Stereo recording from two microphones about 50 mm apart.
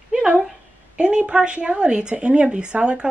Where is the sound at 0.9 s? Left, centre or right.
Right.